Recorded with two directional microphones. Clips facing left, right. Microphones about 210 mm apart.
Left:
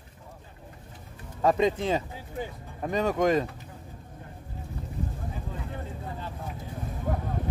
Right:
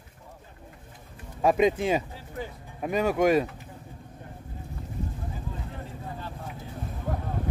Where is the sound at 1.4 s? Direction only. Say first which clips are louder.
Right 2 dB; 15° right (ahead or behind).